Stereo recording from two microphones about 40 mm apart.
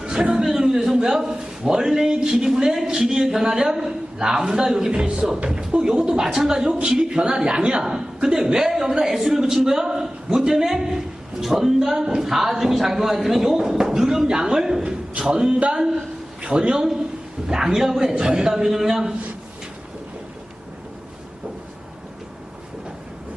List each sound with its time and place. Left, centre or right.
0.0 s a sound: right
0.4 s speech: centre
4.9 s speech: right
7.8 s a man's voice: centre
18.1 s speech: centre